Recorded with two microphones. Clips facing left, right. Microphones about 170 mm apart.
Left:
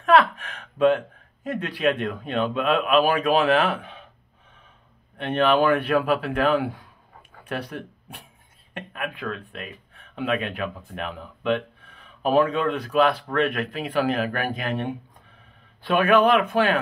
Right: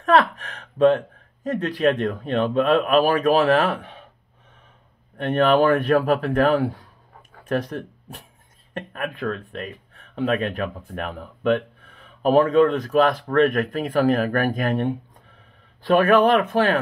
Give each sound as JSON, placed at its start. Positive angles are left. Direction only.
{"t": 0.0, "sound": "speech", "side_deg": -40}
{"t": 5.1, "sound": "a man's voice", "side_deg": -45}